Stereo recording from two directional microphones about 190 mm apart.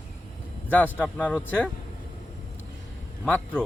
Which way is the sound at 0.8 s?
5° right (ahead or behind).